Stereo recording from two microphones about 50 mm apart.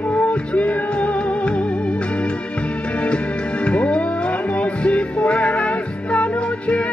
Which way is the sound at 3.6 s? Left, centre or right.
Left.